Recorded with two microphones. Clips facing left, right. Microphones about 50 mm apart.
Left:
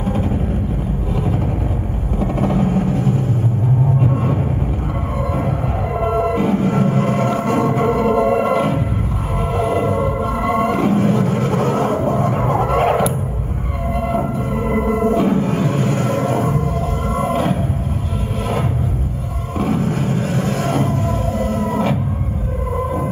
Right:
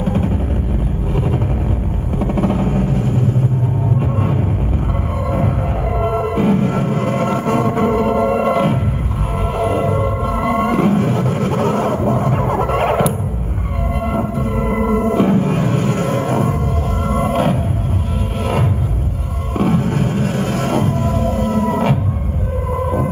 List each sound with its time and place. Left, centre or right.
0.0 s vehicle: right
2.1 s a sound: right
2.9 s music: right
5.3 s music: right
12.1 s a sound: right
13.9 s music: right
19.5 s music: right